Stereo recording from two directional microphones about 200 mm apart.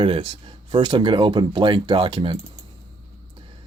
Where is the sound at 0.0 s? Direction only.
25° right (ahead or behind).